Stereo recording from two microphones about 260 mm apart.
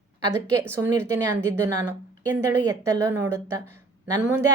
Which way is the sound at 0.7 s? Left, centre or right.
Centre.